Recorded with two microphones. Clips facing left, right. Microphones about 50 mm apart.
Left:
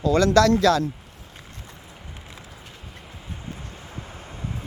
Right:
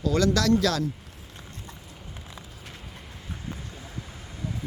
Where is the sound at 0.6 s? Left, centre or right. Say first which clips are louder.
Left 6 dB; left.